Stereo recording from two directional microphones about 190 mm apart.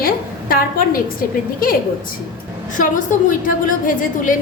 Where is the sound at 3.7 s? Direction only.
45° left (ahead or behind).